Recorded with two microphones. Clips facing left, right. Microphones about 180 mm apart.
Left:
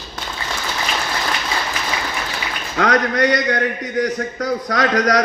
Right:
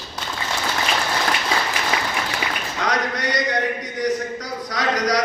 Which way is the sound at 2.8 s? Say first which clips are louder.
Left 8 dB; 55° left (ahead or behind).